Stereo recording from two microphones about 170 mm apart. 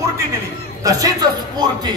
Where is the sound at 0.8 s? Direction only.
20° right (ahead or behind).